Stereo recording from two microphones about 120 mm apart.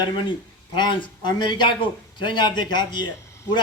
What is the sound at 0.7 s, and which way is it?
Speech, 40° left (ahead or behind).